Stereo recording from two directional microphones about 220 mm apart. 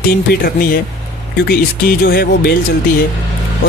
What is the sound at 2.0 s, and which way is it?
Speech, 45° left (ahead or behind).